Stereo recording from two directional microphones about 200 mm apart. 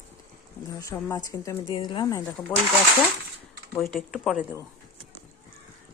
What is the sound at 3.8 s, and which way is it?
Speech, centre (ahead or behind).